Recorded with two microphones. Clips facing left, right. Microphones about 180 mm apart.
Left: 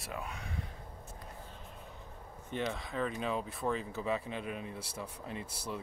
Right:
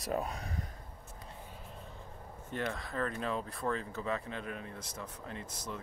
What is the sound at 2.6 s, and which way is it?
Speech, centre (ahead or behind).